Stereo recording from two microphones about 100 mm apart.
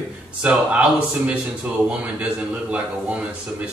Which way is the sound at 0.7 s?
10° right (ahead or behind).